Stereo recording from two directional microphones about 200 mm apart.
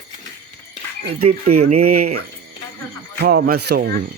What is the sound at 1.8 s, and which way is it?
Speech, 50° right (ahead or behind).